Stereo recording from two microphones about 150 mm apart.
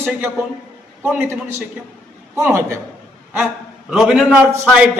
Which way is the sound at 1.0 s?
10° right (ahead or behind).